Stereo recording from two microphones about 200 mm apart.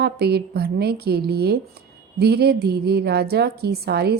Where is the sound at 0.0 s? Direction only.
55° right (ahead or behind).